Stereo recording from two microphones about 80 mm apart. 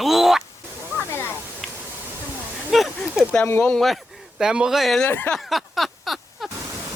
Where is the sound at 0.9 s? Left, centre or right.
Left.